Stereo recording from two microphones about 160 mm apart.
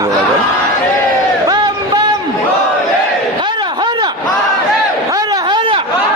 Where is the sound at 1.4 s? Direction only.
25° right (ahead or behind).